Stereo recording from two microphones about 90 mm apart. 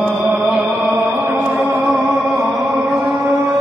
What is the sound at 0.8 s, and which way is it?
Chant, 25° right (ahead or behind).